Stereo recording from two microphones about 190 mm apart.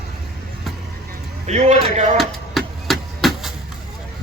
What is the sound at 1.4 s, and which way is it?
Speech, 35° right (ahead or behind).